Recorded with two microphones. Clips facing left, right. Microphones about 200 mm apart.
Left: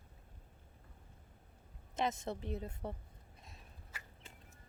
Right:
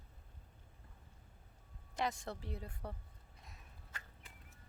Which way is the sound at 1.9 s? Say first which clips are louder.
Left 3 dB; 20° left (ahead or behind).